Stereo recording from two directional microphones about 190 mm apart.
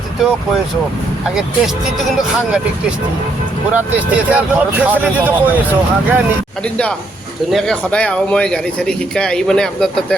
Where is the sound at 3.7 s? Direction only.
10° right (ahead or behind).